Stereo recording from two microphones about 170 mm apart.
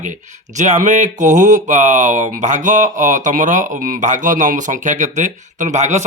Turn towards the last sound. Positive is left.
turn(degrees=-45)  # may be behind; listen again after turning